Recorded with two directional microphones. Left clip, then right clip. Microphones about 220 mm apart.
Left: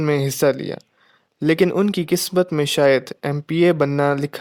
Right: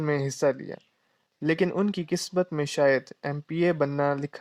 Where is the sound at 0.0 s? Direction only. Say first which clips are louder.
Left 7 dB; 40° left (ahead or behind).